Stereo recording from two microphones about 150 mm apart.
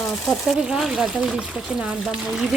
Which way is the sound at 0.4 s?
5° right (ahead or behind).